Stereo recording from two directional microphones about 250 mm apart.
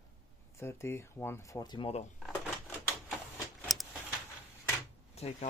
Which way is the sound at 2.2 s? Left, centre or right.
Centre.